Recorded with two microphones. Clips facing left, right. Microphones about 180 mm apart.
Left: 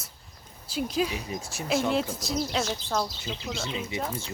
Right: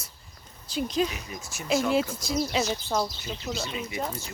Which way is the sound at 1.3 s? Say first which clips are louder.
Left 4 dB; 30° left (ahead or behind).